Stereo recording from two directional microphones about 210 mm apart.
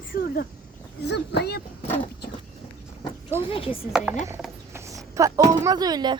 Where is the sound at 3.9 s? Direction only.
5° right (ahead or behind).